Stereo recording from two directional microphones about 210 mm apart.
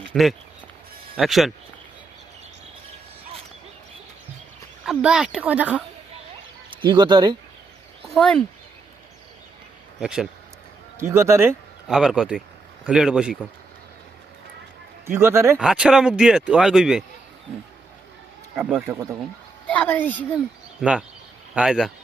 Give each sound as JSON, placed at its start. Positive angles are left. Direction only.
{"t": 0.1, "sound": "speech", "side_deg": 0}
{"t": 4.9, "sound": "speech", "side_deg": -5}
{"t": 6.7, "sound": "speech", "side_deg": -20}
{"t": 8.0, "sound": "speech", "side_deg": 0}
{"t": 10.0, "sound": "speech", "side_deg": -5}
{"t": 15.0, "sound": "speech", "side_deg": -10}
{"t": 18.5, "sound": "speech", "side_deg": -5}
{"t": 19.6, "sound": "a woman's voice", "side_deg": 5}
{"t": 20.8, "sound": "speech", "side_deg": -5}